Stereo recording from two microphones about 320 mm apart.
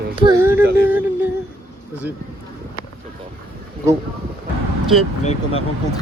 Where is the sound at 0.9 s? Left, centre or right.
Centre.